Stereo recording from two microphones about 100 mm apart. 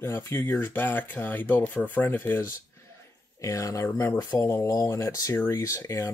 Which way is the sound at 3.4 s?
35° left (ahead or behind).